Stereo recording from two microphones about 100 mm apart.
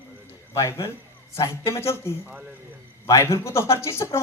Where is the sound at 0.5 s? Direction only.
25° left (ahead or behind).